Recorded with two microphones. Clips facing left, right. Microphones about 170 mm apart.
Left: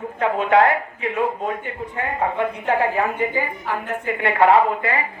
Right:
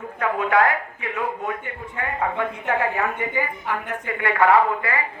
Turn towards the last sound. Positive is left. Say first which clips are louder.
# left 2 dB
turn(degrees=25)  # may be behind; listen again after turning